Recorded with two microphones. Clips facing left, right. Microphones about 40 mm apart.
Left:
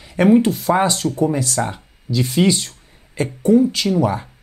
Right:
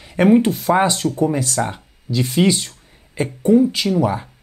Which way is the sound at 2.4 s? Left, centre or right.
Right.